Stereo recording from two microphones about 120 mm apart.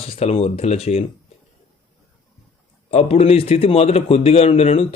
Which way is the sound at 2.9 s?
60° left (ahead or behind).